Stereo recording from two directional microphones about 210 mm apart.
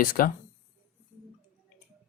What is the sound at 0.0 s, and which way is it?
Speech, 40° left (ahead or behind).